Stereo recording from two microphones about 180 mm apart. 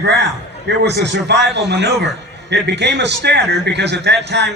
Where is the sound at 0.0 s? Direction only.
70° right (ahead or behind).